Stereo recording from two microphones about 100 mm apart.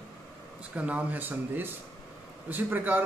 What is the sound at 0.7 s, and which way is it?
A man's voice, 15° right (ahead or behind).